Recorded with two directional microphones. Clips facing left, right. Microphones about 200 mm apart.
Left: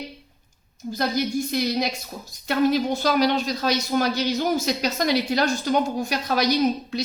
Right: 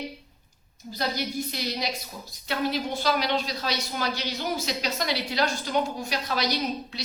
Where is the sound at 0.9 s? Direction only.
50° left (ahead or behind).